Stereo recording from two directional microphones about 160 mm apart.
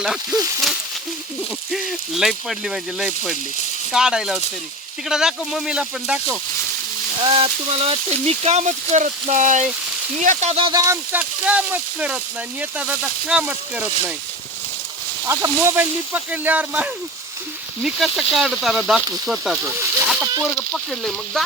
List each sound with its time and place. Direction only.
0.0 s speech: centre (ahead or behind)
0.3 s speech: 20° right (ahead or behind)
1.7 s speech: centre (ahead or behind)
7.2 s speech: 35° right (ahead or behind)
10.7 s speech: 20° right (ahead or behind)
11.1 s speech: 10° right (ahead or behind)
15.3 s speech: 15° right (ahead or behind)
20.7 s speech: 5° left (ahead or behind)